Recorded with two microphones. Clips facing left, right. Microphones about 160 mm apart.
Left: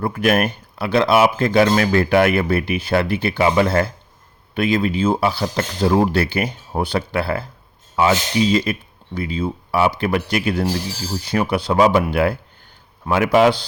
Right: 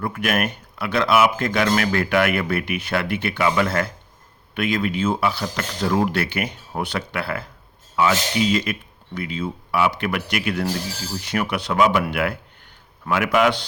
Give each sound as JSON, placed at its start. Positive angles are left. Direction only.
{"t": 0.0, "sound": "speech", "side_deg": 30}